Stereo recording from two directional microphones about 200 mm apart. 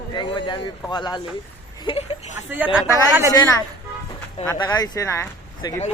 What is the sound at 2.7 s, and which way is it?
Speech, 10° right (ahead or behind).